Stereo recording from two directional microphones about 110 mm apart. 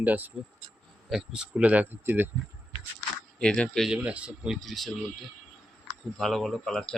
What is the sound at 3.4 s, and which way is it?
Speech, 10° left (ahead or behind).